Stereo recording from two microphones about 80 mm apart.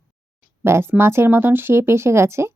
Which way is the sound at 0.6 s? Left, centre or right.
Right.